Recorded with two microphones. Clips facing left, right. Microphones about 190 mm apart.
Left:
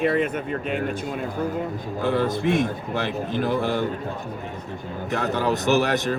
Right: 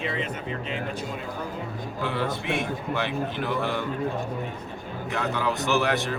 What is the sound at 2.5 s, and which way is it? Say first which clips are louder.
A man's voice: left 4 dB; 45° left (ahead or behind).